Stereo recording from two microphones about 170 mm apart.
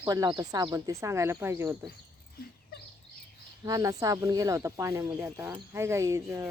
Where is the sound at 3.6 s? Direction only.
20° right (ahead or behind).